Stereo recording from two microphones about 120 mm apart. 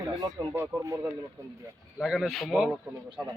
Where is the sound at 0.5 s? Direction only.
20° right (ahead or behind).